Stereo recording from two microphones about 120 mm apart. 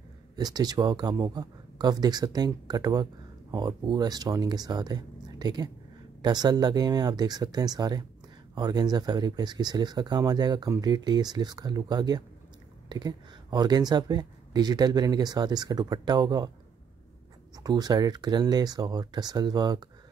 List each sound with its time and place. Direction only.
0.4 s speech: 35° right (ahead or behind)
17.6 s speech: 35° right (ahead or behind)